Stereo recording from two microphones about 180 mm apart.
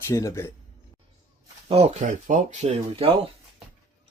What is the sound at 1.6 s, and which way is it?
Speech, 35° right (ahead or behind).